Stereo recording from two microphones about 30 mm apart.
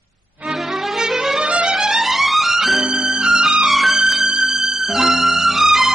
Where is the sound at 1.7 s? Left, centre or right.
Centre.